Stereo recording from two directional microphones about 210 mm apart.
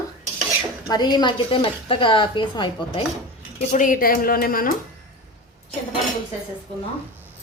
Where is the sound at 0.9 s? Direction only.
20° left (ahead or behind).